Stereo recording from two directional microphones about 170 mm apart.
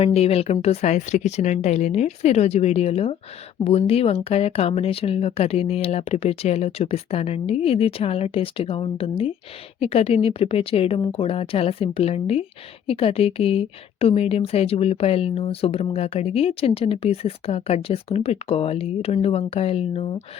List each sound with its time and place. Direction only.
0.0 s a woman's voice: 35° left (ahead or behind)